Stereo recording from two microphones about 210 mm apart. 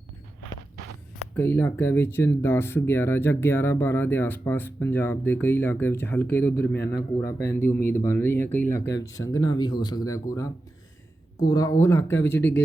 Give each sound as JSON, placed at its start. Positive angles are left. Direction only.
{"t": 1.4, "sound": "speech", "side_deg": 10}